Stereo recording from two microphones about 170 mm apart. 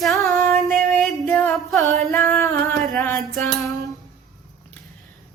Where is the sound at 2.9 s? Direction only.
Centre (ahead or behind).